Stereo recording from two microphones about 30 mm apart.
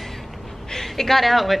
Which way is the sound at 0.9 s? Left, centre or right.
Centre.